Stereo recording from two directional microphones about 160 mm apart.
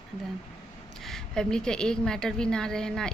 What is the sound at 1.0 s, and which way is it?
A woman's voice, 5° left (ahead or behind).